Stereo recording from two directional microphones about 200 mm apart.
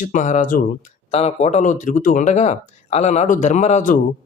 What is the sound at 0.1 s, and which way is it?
Speech, 40° left (ahead or behind).